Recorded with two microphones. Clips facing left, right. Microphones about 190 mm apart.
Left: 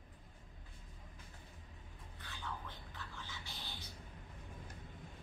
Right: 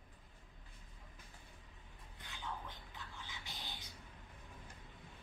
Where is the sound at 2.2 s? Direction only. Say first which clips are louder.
Even; 15° right (ahead or behind).